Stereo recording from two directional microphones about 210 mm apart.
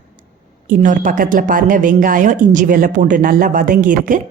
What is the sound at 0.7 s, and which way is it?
A woman's voice, 40° right (ahead or behind).